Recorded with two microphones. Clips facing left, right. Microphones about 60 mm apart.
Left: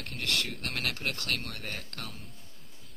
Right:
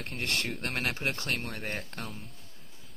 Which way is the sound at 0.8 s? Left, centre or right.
Right.